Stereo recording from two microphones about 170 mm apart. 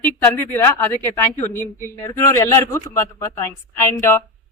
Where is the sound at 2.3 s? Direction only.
15° left (ahead or behind).